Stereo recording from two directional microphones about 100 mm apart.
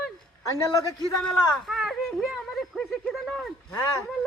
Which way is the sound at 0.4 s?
35° left (ahead or behind).